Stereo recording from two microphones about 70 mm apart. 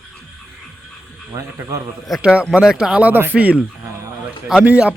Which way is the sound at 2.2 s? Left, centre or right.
Centre.